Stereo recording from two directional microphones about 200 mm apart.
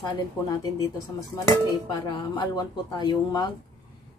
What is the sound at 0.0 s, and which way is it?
Speech, 20° left (ahead or behind).